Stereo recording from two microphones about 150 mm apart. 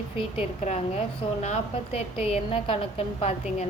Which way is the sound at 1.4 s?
45° left (ahead or behind).